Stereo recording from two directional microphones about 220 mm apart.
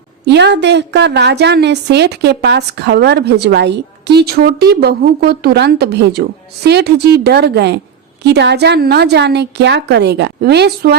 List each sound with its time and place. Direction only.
0.3 s a woman's voice: 50° right (ahead or behind)